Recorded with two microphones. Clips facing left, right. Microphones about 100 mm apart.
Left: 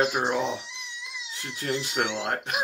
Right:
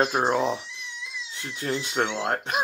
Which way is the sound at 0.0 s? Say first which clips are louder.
Right 2 dB; 35° right (ahead or behind).